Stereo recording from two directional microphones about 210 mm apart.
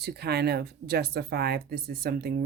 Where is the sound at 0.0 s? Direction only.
50° right (ahead or behind).